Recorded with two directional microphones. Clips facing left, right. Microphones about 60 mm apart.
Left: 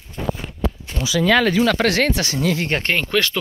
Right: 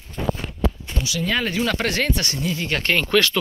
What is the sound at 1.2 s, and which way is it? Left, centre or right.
Speech, left.